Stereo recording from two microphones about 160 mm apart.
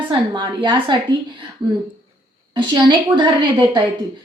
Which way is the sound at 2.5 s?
30° right (ahead or behind).